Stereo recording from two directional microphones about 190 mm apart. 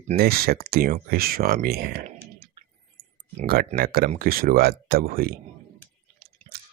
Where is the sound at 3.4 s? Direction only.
50° right (ahead or behind).